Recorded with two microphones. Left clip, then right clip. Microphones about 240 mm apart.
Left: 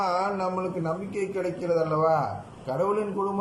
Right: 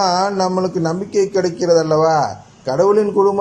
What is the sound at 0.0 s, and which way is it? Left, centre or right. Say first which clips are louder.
A man's voice: right 10 dB; right.